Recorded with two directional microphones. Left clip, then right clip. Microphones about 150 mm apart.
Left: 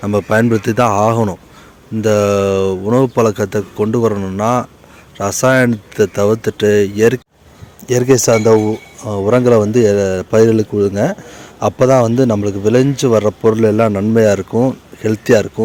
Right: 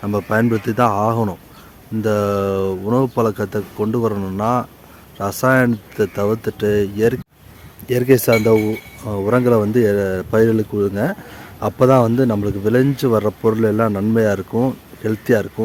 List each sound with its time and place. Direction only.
0.0 s speech: 20° left (ahead or behind)